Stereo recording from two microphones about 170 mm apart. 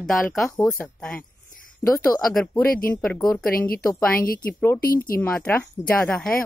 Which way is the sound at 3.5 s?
60° left (ahead or behind).